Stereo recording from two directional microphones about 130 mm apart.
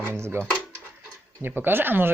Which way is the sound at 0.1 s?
20° right (ahead or behind).